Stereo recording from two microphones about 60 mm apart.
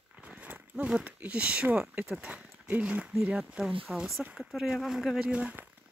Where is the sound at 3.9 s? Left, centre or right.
Centre.